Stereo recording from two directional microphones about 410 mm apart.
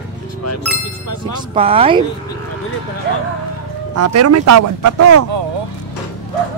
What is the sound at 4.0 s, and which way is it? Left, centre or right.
Speech, right.